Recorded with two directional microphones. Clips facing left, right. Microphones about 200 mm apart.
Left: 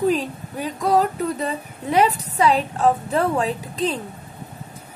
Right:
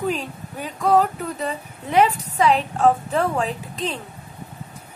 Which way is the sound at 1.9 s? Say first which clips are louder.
Even; 40° left (ahead or behind).